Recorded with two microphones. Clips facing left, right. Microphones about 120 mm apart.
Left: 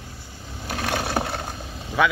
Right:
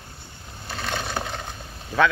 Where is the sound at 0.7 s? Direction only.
10° left (ahead or behind).